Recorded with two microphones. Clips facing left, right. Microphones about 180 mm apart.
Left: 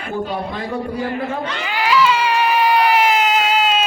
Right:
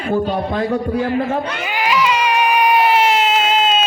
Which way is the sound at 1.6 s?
20° right (ahead or behind).